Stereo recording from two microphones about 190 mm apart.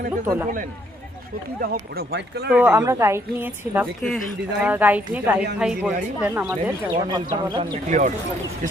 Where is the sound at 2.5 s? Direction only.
5° right (ahead or behind).